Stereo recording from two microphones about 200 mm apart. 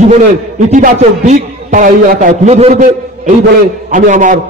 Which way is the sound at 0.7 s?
35° right (ahead or behind).